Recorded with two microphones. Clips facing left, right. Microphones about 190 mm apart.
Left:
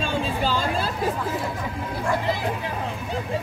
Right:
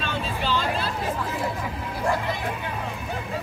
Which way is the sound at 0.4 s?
45° left (ahead or behind).